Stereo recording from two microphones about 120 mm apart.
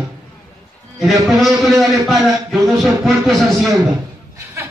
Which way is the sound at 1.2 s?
Centre (ahead or behind).